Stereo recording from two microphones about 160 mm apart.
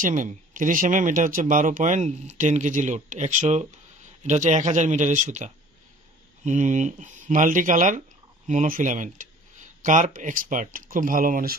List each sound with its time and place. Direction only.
0.0 s speech: 55° right (ahead or behind)